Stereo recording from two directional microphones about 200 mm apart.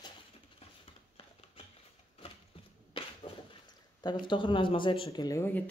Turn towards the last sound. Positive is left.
turn(degrees=10)  # may be behind; listen again after turning